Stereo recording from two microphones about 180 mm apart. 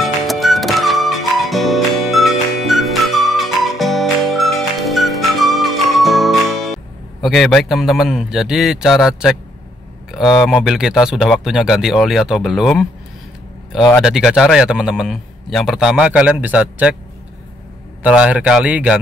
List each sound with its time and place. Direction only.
0.0 s music: centre (ahead or behind)
10.1 s speech: centre (ahead or behind)
14.0 s speech: 5° right (ahead or behind)
18.0 s speech: 5° right (ahead or behind)